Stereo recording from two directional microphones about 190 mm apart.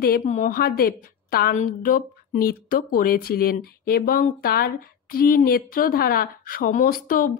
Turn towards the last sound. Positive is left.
turn(degrees=45)  # may be behind; listen again after turning